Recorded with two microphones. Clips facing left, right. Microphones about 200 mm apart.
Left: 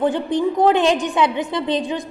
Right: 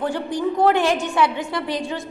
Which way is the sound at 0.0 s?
20° left (ahead or behind).